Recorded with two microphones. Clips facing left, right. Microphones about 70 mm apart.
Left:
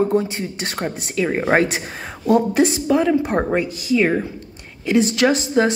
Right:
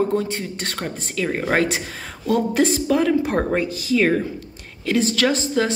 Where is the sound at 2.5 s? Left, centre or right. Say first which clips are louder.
Left 2 dB; centre.